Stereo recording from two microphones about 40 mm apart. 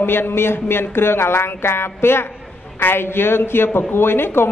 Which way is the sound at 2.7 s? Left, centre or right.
Left.